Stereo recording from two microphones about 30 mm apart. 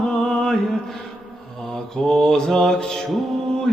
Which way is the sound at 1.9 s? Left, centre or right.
Centre.